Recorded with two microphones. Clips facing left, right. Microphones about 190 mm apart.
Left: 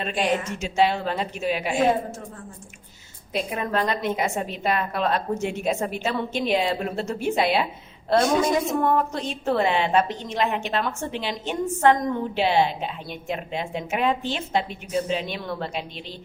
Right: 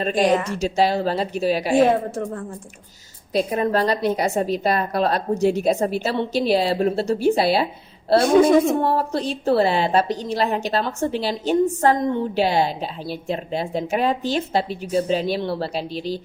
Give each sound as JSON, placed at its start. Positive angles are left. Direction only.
{"t": 0.0, "sound": "a woman's voice", "side_deg": -40}
{"t": 3.3, "sound": "a woman's voice", "side_deg": -35}
{"t": 8.4, "sound": "speech", "side_deg": -55}
{"t": 8.8, "sound": "a woman's voice", "side_deg": -35}